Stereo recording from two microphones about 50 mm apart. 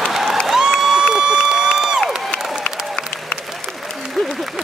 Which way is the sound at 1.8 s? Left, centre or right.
Centre.